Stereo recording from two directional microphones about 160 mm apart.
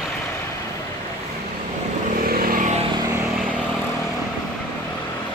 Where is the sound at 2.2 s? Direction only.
65° right (ahead or behind).